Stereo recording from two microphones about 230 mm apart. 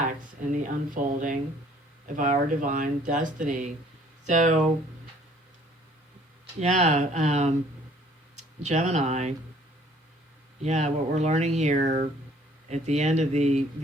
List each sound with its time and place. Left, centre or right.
0.5 s speech: right
6.6 s speech: right
8.6 s speech: right
10.6 s speech: right